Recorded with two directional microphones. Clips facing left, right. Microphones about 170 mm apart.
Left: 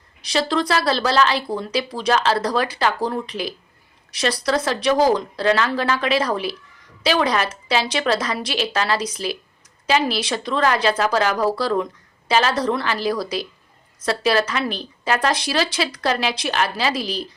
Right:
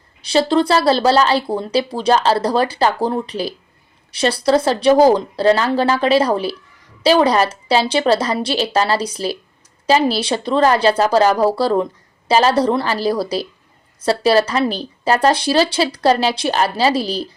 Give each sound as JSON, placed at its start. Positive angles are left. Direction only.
{"t": 0.2, "sound": "speech", "side_deg": -30}